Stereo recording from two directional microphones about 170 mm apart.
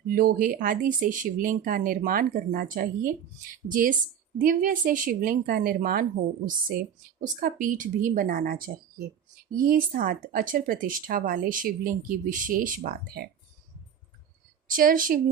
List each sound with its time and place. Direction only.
0.1 s speech: 55° right (ahead or behind)
14.7 s speech: 55° right (ahead or behind)